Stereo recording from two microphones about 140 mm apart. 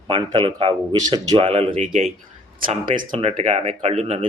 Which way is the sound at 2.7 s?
75° right (ahead or behind).